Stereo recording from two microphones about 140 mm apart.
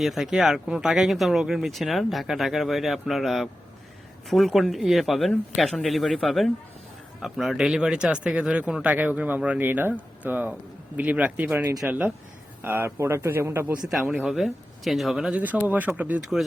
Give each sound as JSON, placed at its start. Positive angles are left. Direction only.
{"t": 0.0, "sound": "speech", "side_deg": 0}
{"t": 14.3, "sound": "speech", "side_deg": 0}